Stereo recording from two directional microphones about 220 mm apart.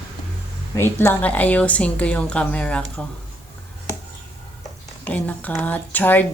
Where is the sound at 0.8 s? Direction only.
10° left (ahead or behind).